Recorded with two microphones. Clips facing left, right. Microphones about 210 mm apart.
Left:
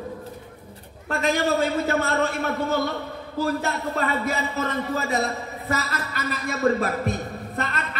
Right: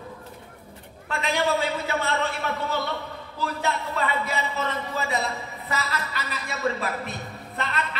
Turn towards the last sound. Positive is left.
turn(degrees=45)  # may be behind; listen again after turning